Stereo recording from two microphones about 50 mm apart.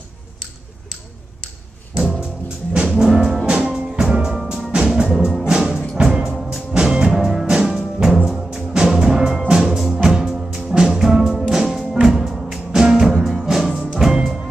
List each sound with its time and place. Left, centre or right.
2.0 s music: centre
6.7 s music: centre